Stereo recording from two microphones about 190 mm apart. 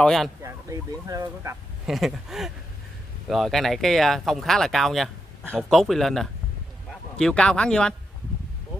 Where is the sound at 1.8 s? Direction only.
Centre (ahead or behind).